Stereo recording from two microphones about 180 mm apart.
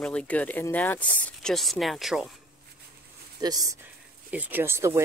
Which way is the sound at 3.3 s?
20° right (ahead or behind).